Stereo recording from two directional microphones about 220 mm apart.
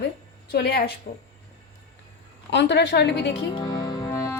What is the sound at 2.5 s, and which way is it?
Speech, 50° left (ahead or behind).